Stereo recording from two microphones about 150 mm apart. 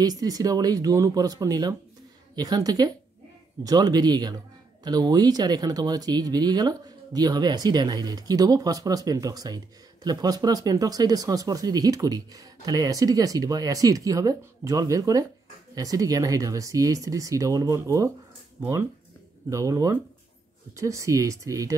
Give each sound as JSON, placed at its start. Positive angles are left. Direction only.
{"t": 0.0, "sound": "speech", "side_deg": -25}